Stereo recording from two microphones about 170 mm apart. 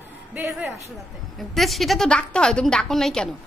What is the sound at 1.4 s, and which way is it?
A woman's voice, centre (ahead or behind).